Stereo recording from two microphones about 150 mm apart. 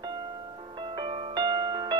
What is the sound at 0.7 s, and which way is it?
Music, 30° right (ahead or behind).